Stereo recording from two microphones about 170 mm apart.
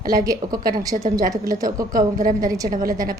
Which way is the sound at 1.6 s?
20° right (ahead or behind).